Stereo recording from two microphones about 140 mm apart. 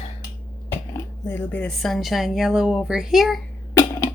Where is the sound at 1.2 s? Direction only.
15° left (ahead or behind).